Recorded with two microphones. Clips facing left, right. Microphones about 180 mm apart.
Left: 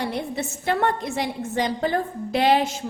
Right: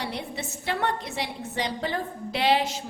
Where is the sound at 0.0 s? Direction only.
50° left (ahead or behind).